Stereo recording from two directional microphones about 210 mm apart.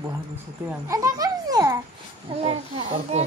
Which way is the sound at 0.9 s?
15° right (ahead or behind).